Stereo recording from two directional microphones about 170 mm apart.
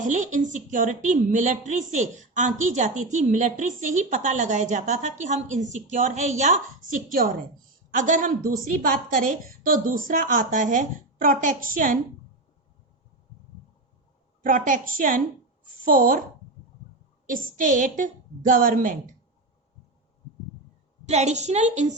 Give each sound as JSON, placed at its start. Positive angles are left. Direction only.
{"t": 0.0, "sound": "a woman's voice", "side_deg": -45}
{"t": 7.1, "sound": "a woman's voice", "side_deg": -55}
{"t": 14.4, "sound": "a woman's voice", "side_deg": -50}
{"t": 17.2, "sound": "a woman's voice", "side_deg": -50}
{"t": 21.1, "sound": "a woman's voice", "side_deg": -40}